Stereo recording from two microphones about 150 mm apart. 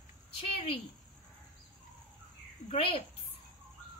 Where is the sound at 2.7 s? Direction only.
45° left (ahead or behind).